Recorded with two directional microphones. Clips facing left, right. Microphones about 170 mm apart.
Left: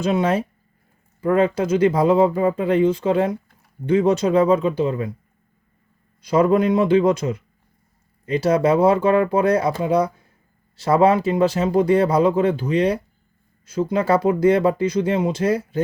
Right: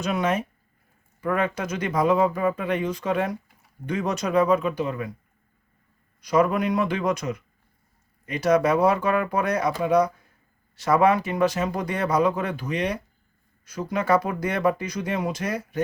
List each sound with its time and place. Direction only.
0.0 s speech: 30° left (ahead or behind)
6.2 s speech: 30° left (ahead or behind)